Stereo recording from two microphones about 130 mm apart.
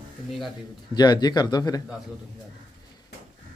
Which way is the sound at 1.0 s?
30° left (ahead or behind).